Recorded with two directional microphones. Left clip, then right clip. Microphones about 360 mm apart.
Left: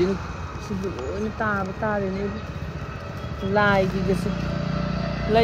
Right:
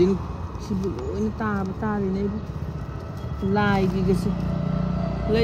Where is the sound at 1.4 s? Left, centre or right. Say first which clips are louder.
Left 3 dB; centre.